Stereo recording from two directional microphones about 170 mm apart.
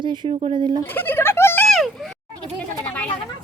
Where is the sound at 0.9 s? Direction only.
10° left (ahead or behind).